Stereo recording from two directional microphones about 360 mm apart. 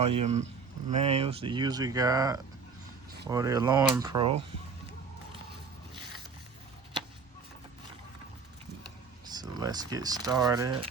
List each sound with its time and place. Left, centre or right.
0.0 s speech: centre
9.3 s speech: centre